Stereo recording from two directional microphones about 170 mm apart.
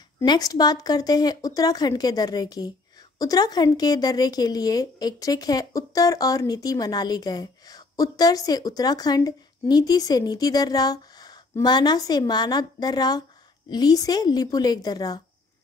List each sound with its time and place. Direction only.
0.2 s a woman's voice: 25° left (ahead or behind)